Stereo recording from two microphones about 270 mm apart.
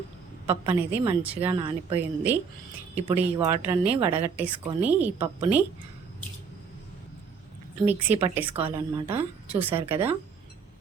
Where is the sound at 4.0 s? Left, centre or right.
Right.